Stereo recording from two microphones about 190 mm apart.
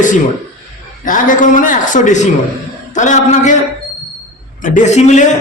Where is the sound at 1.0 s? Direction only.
45° left (ahead or behind).